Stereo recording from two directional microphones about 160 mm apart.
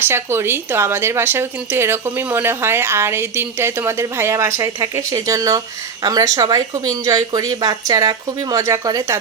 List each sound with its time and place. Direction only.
0.0 s a woman's voice: 15° right (ahead or behind)